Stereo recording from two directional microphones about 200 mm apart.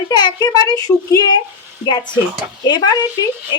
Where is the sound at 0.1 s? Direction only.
20° left (ahead or behind).